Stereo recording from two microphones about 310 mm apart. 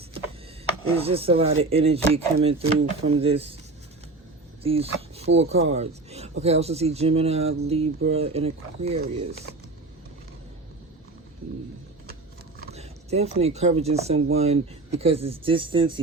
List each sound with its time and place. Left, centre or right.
1.0 s speech: centre
4.6 s speech: centre
6.1 s a sound: centre
6.4 s speech: centre
12.7 s speech: right